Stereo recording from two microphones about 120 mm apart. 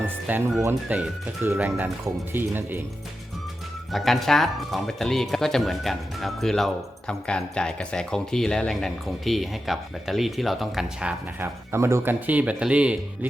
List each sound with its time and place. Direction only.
0.0 s music: 15° right (ahead or behind)
0.9 s speech: 10° right (ahead or behind)
3.9 s speech: centre (ahead or behind)
11.3 s speech: 20° right (ahead or behind)